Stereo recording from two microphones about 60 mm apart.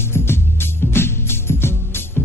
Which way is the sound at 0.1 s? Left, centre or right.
Left.